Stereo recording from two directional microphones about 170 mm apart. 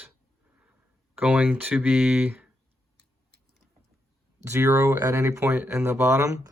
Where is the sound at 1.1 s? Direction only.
10° right (ahead or behind).